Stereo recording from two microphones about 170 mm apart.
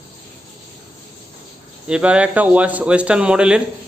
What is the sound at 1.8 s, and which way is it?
Speech, 5° right (ahead or behind).